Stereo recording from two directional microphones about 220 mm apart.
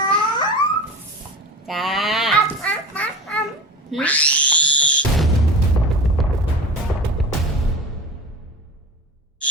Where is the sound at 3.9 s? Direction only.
5° left (ahead or behind).